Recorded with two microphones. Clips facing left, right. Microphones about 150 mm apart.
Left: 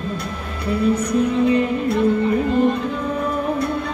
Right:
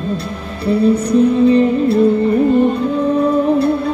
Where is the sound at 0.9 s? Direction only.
30° right (ahead or behind).